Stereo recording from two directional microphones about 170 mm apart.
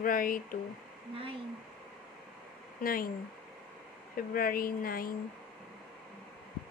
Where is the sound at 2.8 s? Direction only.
55° left (ahead or behind).